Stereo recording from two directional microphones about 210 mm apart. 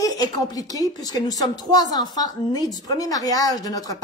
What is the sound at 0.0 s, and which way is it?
Speech, 15° left (ahead or behind).